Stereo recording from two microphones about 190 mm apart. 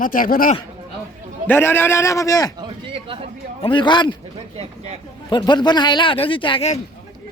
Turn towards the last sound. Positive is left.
turn(degrees=30)  # may be behind; listen again after turning